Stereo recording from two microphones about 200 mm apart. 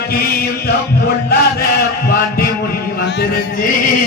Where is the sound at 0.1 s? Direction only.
50° left (ahead or behind).